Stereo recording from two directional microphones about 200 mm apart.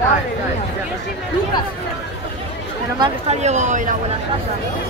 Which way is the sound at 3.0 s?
35° right (ahead or behind).